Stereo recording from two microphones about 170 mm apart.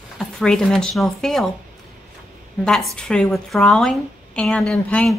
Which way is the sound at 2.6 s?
Centre (ahead or behind).